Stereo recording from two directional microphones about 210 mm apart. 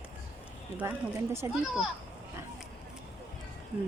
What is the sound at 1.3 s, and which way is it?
Speech, 10° right (ahead or behind).